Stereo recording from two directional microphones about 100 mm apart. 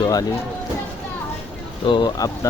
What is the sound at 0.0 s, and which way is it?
Speech, 40° left (ahead or behind).